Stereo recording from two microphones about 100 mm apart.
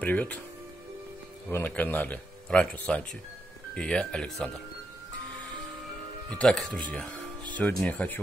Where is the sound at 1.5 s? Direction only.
15° left (ahead or behind).